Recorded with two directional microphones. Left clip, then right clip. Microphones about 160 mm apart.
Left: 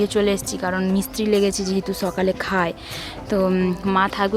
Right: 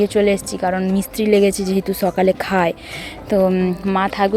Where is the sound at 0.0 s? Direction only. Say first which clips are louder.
Right 4 dB; 10° right (ahead or behind).